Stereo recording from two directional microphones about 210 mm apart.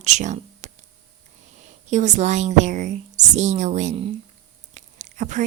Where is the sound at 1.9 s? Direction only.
35° right (ahead or behind).